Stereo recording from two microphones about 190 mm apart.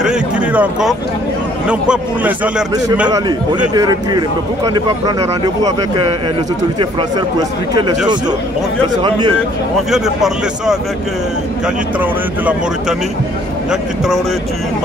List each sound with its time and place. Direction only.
0.0 s speech: 5° right (ahead or behind)
3.7 s speech: 20° right (ahead or behind)
9.8 s speech: centre (ahead or behind)